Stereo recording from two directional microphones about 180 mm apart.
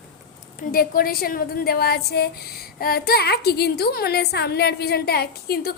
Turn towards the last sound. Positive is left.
turn(degrees=60)  # may be behind; listen again after turning